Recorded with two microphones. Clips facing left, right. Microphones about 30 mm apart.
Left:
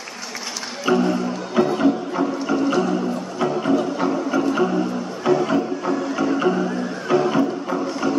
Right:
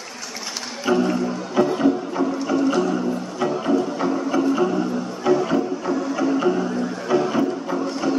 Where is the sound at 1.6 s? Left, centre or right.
Centre.